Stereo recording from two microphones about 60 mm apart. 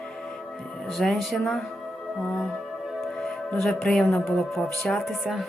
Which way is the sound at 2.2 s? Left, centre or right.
Centre.